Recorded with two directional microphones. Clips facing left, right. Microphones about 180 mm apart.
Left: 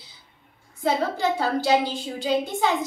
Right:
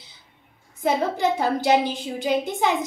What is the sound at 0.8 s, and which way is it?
A woman's voice, 15° right (ahead or behind).